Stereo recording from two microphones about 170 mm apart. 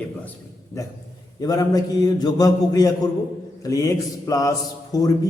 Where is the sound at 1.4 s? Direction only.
20° left (ahead or behind).